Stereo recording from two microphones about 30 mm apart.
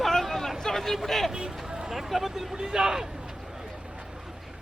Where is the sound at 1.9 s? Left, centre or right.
Centre.